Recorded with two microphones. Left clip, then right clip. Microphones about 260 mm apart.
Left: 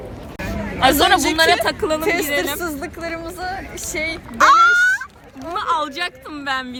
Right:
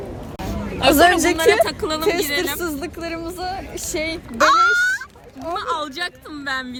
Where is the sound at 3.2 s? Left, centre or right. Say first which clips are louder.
Even; centre.